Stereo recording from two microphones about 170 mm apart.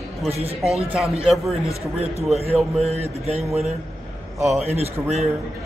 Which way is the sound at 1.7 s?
35° right (ahead or behind).